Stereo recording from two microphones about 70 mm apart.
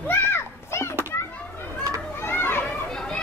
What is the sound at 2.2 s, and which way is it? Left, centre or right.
Children playing, left.